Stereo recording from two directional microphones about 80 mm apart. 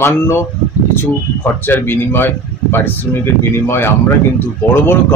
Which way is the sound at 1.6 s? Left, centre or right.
Left.